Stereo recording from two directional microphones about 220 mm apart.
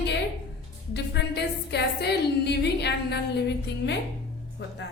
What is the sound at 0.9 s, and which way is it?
A woman's voice, 50° left (ahead or behind).